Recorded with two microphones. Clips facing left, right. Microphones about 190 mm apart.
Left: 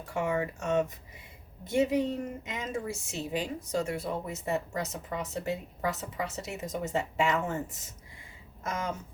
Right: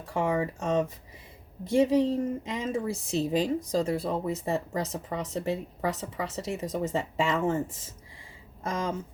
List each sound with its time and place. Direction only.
0.1 s speech: 30° right (ahead or behind)
1.6 s speech: 30° right (ahead or behind)